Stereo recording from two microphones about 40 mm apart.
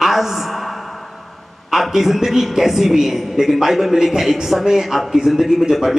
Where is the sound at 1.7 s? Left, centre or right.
Centre.